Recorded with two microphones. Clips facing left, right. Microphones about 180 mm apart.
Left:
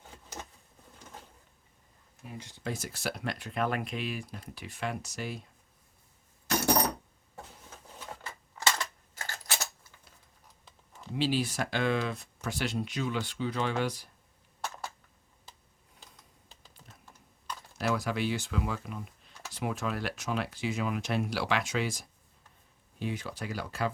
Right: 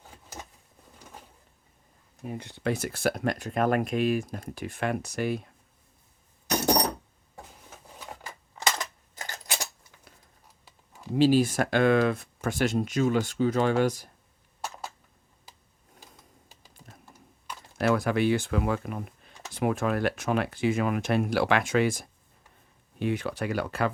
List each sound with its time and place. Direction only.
2.2 s speech: 55° right (ahead or behind)
6.5 s a sound: 20° right (ahead or behind)
7.7 s coin: 10° right (ahead or behind)
10.7 s a sound: 10° right (ahead or behind)
11.1 s speech: 45° right (ahead or behind)
17.7 s speech: 55° right (ahead or behind)